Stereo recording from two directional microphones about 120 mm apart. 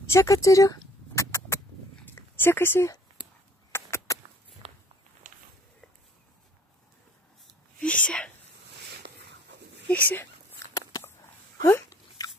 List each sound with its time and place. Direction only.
0.1 s a sound: 25° left (ahead or behind)
2.1 s speech: 20° left (ahead or behind)
3.7 s rodents: 20° left (ahead or behind)
7.8 s speech: 10° left (ahead or behind)
9.8 s speech: 15° left (ahead or behind)
10.7 s a sound: 30° left (ahead or behind)